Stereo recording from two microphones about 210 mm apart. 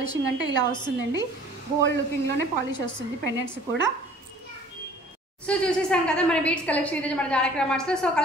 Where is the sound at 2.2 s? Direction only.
20° left (ahead or behind).